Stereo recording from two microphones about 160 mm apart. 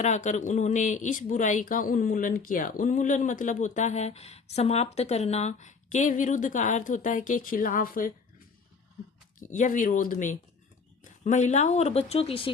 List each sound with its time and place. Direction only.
0.0 s speech: 45° left (ahead or behind); by 8.1 s 60° left (ahead or behind)
9.4 s speech: 55° left (ahead or behind); by 12.5 s 35° left (ahead or behind)